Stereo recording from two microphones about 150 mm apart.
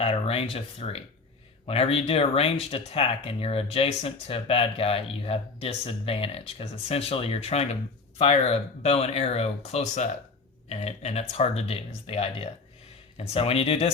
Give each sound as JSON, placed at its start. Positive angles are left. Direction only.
{"t": 0.0, "sound": "speech", "side_deg": 40}